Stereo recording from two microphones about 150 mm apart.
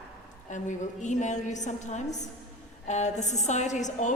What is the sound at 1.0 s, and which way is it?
A woman's voice, 55° left (ahead or behind).